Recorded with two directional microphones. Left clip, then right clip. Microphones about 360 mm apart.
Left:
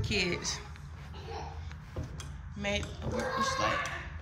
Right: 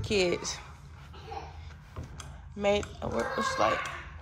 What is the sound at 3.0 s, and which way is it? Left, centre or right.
Speech, centre.